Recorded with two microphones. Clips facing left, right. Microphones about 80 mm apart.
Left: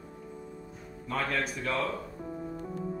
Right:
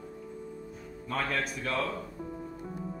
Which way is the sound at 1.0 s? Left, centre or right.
Centre.